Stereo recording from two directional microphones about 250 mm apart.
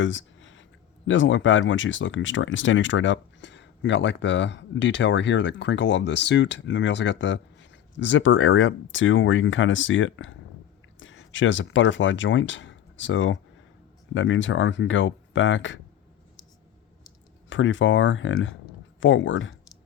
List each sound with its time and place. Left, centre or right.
0.0 s a sound: left
1.0 s speech: left
17.5 s speech: left